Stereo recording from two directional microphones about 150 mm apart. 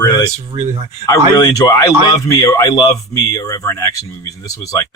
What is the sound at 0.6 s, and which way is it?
Speech, 45° right (ahead or behind).